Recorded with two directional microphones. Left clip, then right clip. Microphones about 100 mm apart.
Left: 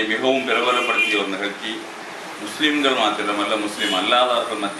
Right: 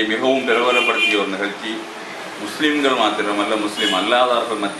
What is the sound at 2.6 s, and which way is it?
A man's voice, centre (ahead or behind).